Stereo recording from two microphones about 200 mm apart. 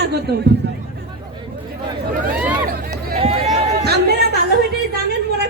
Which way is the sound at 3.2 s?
30° right (ahead or behind).